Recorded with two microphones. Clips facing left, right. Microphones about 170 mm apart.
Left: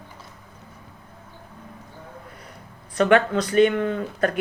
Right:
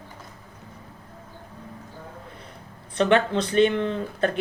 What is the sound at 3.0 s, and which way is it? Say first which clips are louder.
Speech: left 2 dB; 30° right (ahead or behind).